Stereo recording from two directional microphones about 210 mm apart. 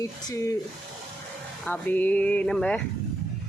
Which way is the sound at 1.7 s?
10° left (ahead or behind).